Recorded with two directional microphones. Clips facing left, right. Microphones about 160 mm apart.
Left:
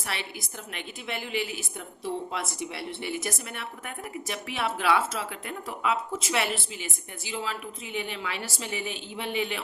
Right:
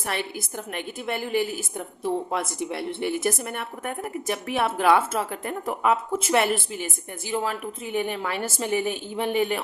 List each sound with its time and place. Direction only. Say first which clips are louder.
0.0 s a woman's voice: right 6 dB; 45° right (ahead or behind)